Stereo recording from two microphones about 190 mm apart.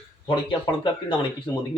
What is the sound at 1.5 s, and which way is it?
Speech, 10° left (ahead or behind).